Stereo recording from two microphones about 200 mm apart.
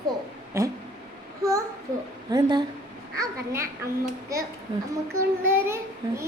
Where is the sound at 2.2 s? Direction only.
20° right (ahead or behind).